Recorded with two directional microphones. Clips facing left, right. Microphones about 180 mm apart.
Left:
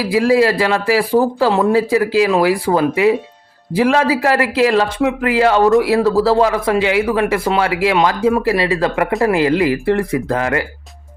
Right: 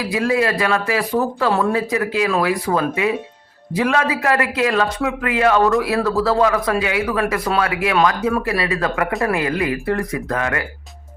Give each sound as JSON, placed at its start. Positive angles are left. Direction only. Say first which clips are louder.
{"t": 0.0, "sound": "speech", "louder": "left 6 dB", "side_deg": 30}